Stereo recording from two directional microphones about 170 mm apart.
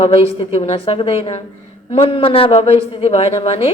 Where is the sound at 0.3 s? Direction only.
35° left (ahead or behind).